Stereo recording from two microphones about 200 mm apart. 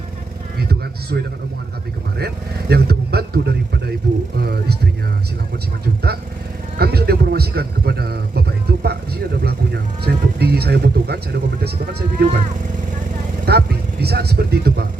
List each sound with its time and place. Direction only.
1.1 s a man's voice: 55° right (ahead or behind)
2.1 s vehicle: 55° right (ahead or behind)
4.4 s a sound: 50° right (ahead or behind)
5.8 s vehicle: 50° right (ahead or behind)
6.7 s a sound: 50° right (ahead or behind)
13.4 s vehicle: 50° right (ahead or behind)